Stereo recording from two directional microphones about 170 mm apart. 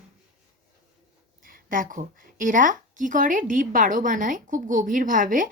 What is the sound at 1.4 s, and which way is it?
A woman's voice, 55° right (ahead or behind).